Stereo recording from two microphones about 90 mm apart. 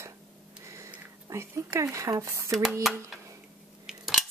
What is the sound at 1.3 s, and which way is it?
Speech, 35° right (ahead or behind).